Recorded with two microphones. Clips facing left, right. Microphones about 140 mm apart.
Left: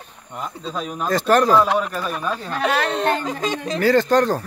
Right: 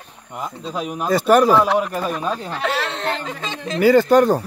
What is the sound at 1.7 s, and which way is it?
Speech, 20° right (ahead or behind).